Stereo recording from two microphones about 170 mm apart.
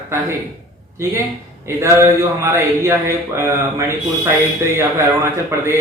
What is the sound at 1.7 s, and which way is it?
Speech, 15° right (ahead or behind).